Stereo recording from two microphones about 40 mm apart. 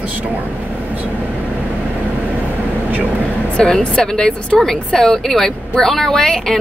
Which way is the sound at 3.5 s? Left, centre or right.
Centre.